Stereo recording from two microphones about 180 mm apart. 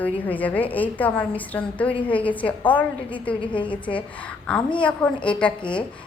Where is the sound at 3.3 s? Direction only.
25° left (ahead or behind).